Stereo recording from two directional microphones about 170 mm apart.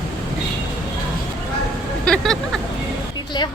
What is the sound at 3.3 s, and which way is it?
Speech, 25° left (ahead or behind).